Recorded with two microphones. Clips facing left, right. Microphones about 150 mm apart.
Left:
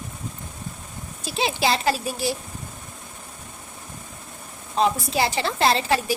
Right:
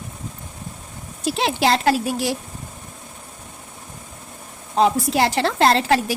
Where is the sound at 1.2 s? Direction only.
90° right.